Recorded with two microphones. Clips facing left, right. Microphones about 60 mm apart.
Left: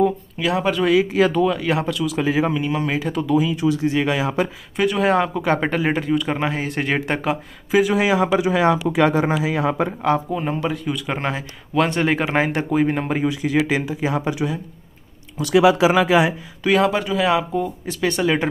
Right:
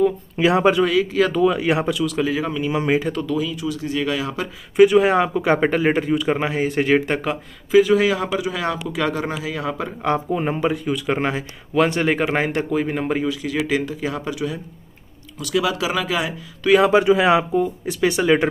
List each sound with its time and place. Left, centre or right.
0.4 s speech: right
0.8 s speech: centre
1.3 s speech: centre
2.0 s speech: centre
2.2 s speech: left
3.5 s speech: left
4.7 s speech: centre; by 9.8 s left
10.1 s speech: centre
13.2 s speech: left
16.8 s speech: centre
17.6 s speech: centre